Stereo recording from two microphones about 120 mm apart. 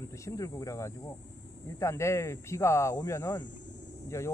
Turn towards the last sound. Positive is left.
turn(degrees=25)  # may be behind; listen again after turning